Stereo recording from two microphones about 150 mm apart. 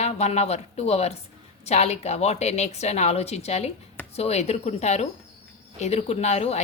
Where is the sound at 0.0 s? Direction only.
45° left (ahead or behind).